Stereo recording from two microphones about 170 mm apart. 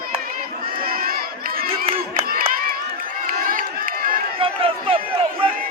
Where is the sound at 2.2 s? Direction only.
60° right (ahead or behind).